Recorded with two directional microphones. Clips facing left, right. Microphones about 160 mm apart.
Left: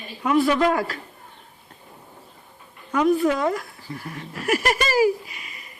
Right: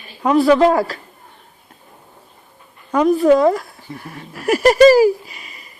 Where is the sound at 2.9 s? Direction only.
35° right (ahead or behind).